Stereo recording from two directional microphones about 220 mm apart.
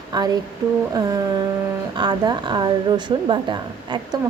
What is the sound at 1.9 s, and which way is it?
A woman's voice, 20° right (ahead or behind).